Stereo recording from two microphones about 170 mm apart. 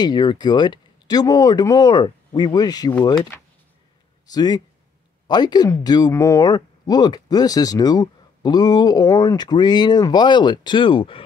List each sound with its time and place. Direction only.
0.0 s speech: 25° left (ahead or behind)
4.3 s speech: 25° left (ahead or behind)